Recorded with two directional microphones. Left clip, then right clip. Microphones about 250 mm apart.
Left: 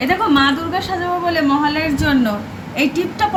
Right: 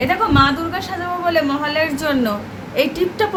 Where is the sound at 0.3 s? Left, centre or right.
Centre.